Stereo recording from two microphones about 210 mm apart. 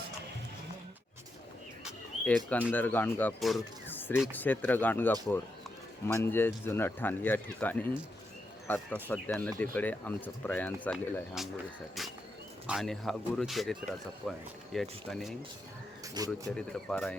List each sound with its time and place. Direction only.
1.8 s bird: 5° left (ahead or behind)
2.7 s speech: 10° left (ahead or behind)
6.1 s speech: 10° left (ahead or behind)
12.0 s a sound: centre (ahead or behind)
12.6 s speech: centre (ahead or behind)
16.1 s speech: 15° right (ahead or behind)
16.6 s speech: 5° left (ahead or behind)